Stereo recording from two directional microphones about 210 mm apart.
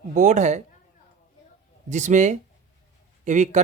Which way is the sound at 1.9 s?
35° right (ahead or behind).